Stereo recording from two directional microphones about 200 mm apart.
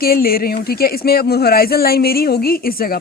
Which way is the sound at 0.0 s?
50° left (ahead or behind).